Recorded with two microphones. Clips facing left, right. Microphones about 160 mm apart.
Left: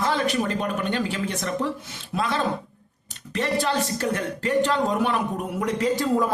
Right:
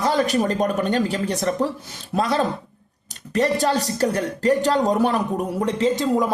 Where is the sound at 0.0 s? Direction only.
40° right (ahead or behind).